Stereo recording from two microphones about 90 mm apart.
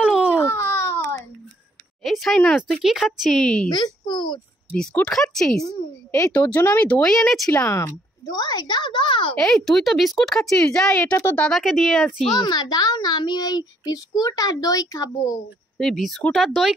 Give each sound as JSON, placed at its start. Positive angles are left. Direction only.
{"t": 0.0, "sound": "baby cry", "side_deg": -15}
{"t": 0.4, "sound": "a sound", "side_deg": 25}
{"t": 2.0, "sound": "speech", "side_deg": 0}
{"t": 3.7, "sound": "speech", "side_deg": 55}
{"t": 5.1, "sound": "speech", "side_deg": 5}
{"t": 5.6, "sound": "a woman's voice", "side_deg": 40}
{"t": 6.3, "sound": "speech", "side_deg": 15}
{"t": 7.6, "sound": "a woman's voice", "side_deg": 35}
{"t": 8.4, "sound": "speech", "side_deg": 50}
{"t": 9.4, "sound": "speech", "side_deg": 5}
{"t": 12.4, "sound": "a child's voice", "side_deg": 50}
{"t": 15.8, "sound": "speech", "side_deg": 5}